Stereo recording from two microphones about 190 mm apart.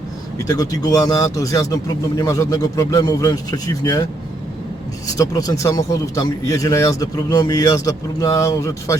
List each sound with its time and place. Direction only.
0.4 s speech: 20° left (ahead or behind)
5.0 s speech: 20° left (ahead or behind)